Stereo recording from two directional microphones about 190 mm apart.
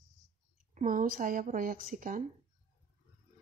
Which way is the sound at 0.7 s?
45° right (ahead or behind).